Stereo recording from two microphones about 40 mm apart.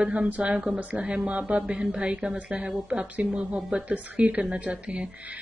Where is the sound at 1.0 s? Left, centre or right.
Right.